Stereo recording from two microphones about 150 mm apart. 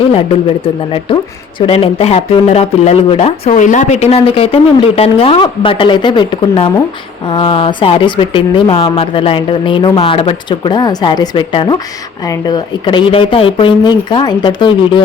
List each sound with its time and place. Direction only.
0.6 s speech: 35° left (ahead or behind)
3.5 s speech: 55° left (ahead or behind); by 15.0 s 30° left (ahead or behind)